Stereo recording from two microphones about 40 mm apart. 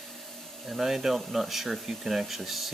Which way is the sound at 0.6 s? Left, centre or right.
Centre.